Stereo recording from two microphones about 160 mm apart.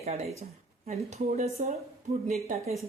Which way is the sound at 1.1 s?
45° right (ahead or behind).